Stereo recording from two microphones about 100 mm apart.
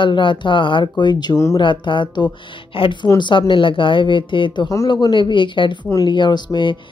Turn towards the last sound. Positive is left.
turn(degrees=55)  # may be behind; listen again after turning